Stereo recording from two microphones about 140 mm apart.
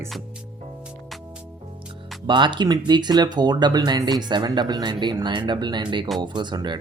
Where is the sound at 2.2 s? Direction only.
35° right (ahead or behind).